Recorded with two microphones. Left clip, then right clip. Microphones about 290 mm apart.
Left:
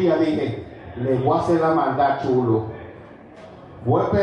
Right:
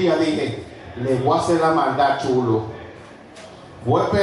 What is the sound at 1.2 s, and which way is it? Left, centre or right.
A man's voice, left.